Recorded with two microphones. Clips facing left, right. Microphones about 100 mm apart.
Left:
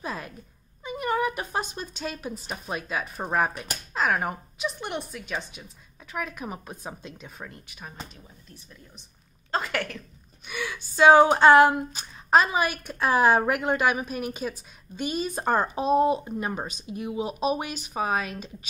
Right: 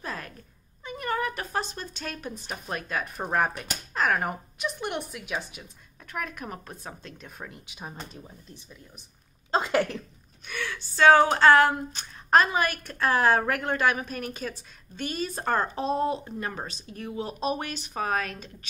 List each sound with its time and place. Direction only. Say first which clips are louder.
0.0 s cat: left 2 dB; 10° left (ahead or behind)
0.8 s a woman's voice: left 3 dB; 10° left (ahead or behind)
7.2 s speech: even; centre (ahead or behind)
7.6 s speech: right 3 dB; 20° right (ahead or behind)
9.5 s speech: right 4 dB; 25° right (ahead or behind)
10.4 s a woman's voice: left 1 dB; 10° left (ahead or behind)
11.9 s a woman's voice: left 1 dB; 5° left (ahead or behind)